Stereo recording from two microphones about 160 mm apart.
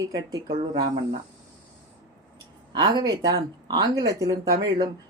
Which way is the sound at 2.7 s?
30° right (ahead or behind).